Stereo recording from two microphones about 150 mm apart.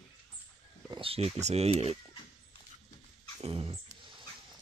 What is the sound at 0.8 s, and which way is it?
Speech, 35° right (ahead or behind).